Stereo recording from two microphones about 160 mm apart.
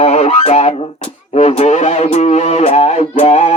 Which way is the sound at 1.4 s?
45° left (ahead or behind).